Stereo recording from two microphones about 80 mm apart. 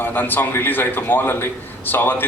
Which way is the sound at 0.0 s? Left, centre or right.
Left.